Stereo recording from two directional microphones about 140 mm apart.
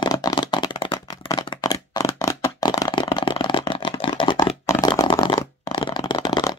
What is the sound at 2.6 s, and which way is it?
Shuffling cards, 30° left (ahead or behind).